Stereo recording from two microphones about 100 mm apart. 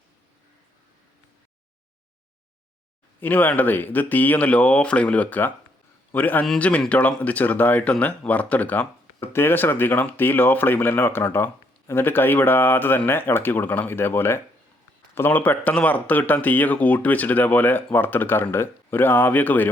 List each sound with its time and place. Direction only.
3.2 s a man's voice: 20° left (ahead or behind)